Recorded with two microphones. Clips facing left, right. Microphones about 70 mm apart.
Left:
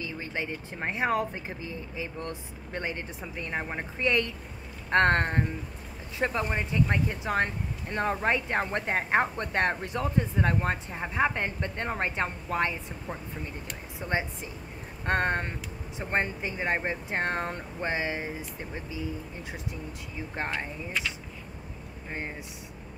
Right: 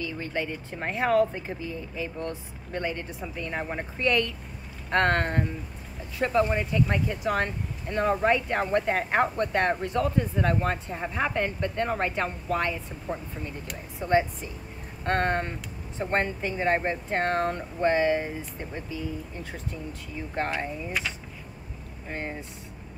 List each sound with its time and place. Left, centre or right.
0.0 s a woman's voice: left
2.7 s speech: left
13.9 s speech: centre
20.5 s speech: centre